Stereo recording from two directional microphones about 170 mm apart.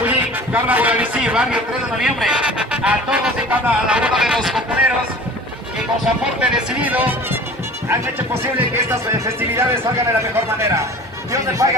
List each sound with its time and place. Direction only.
0.0 s a man's voice: 10° right (ahead or behind)
6.0 s speech: 5° right (ahead or behind)
8.5 s speech: 15° right (ahead or behind)